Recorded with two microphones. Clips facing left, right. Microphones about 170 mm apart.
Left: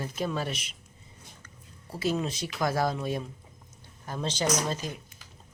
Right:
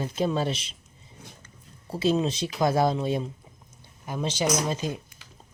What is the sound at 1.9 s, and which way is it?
Speech, 25° right (ahead or behind).